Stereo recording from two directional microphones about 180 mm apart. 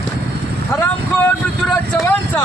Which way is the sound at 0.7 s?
10° left (ahead or behind).